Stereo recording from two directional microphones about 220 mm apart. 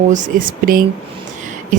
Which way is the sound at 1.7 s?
35° right (ahead or behind).